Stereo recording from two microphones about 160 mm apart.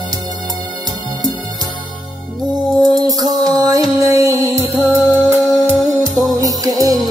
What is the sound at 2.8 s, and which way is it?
Music, 25° right (ahead or behind).